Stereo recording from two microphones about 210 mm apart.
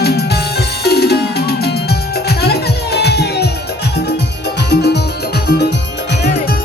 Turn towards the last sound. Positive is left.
turn(degrees=50)  # may be behind; listen again after turning